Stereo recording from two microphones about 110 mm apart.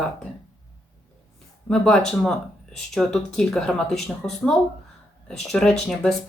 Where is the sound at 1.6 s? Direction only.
5° left (ahead or behind).